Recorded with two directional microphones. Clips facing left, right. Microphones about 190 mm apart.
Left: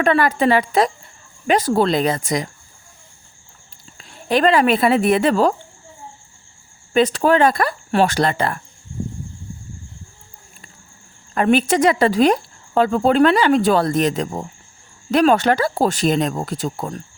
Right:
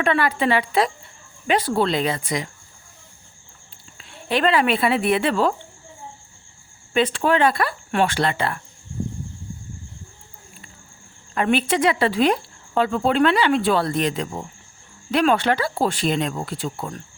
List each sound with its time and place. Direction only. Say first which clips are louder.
0.0 s speech: left 4 dB; 40° left (ahead or behind)
3.9 s speech: left 4 dB; 40° left (ahead or behind)
6.9 s speech: left 4 dB; 40° left (ahead or behind)
11.3 s speech: left 4 dB; 40° left (ahead or behind)